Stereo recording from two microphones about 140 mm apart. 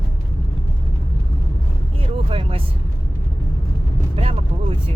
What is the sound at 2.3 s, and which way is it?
Speech, 40° right (ahead or behind).